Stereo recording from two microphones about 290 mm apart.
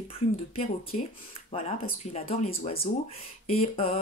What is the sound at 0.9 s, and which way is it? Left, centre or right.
Speech, left.